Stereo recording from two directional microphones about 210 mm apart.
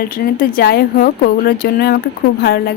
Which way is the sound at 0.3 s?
45° left (ahead or behind).